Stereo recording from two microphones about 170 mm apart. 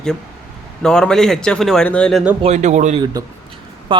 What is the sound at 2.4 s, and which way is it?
Speech, 40° right (ahead or behind).